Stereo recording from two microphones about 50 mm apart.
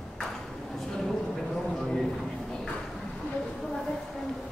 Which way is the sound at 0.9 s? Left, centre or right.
Centre.